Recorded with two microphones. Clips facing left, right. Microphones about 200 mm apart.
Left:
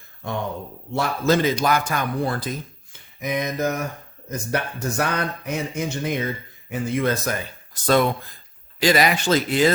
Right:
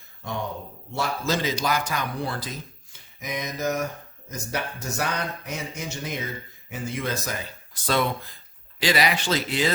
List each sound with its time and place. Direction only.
0.9 s speech: 55° left (ahead or behind)
2.9 s a sound: 55° left (ahead or behind)
6.7 s speech: 55° left (ahead or behind)